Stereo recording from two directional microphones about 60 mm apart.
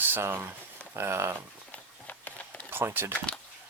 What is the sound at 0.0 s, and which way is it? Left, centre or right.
Speech, right.